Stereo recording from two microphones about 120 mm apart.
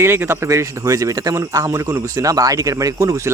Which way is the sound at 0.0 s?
20° right (ahead or behind).